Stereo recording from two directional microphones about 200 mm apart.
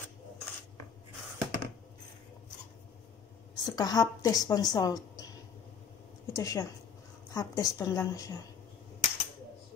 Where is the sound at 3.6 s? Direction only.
20° left (ahead or behind).